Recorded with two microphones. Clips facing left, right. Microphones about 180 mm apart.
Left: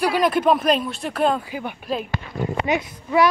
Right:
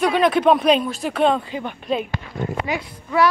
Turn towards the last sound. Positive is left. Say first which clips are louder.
# even
turn(degrees=20)  # may be behind; listen again after turning